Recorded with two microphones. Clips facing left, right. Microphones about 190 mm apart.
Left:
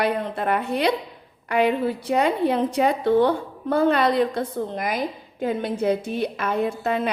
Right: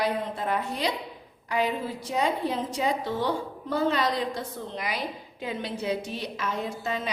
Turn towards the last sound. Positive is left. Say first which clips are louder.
# left 8 dB
turn(degrees=60)  # may be behind; listen again after turning